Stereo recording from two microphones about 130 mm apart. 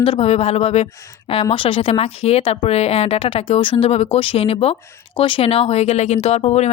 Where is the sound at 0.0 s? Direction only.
50° left (ahead or behind).